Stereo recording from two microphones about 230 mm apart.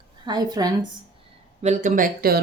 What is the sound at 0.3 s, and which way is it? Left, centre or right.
Speech, centre.